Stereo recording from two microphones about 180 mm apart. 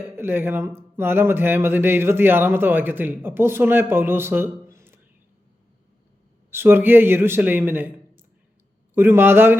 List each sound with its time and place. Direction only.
0.2 s speech: 10° right (ahead or behind)
6.5 s speech: 10° right (ahead or behind)